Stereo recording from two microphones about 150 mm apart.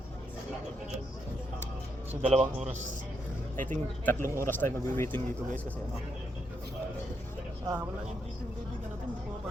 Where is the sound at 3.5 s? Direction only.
60° right (ahead or behind).